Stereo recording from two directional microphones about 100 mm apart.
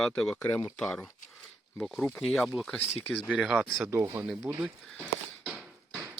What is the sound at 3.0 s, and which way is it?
Speech, 15° left (ahead or behind).